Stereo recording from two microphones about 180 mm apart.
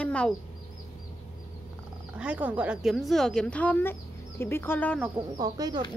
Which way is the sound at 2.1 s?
5° right (ahead or behind).